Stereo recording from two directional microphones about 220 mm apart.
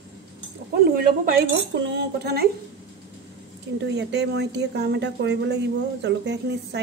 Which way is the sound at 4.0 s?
50° right (ahead or behind).